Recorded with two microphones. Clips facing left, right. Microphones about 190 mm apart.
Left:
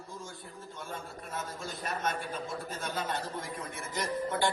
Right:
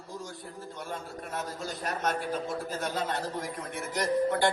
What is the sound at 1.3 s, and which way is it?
A man's voice, 65° right (ahead or behind).